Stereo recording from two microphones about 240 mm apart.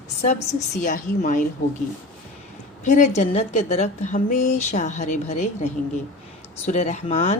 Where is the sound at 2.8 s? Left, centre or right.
Left.